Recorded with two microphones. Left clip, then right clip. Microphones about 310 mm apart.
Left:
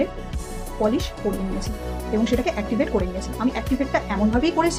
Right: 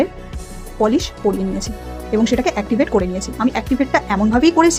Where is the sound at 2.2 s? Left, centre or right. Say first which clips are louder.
Right 5 dB; right.